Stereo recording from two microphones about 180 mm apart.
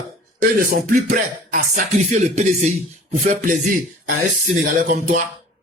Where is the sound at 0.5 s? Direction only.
50° right (ahead or behind).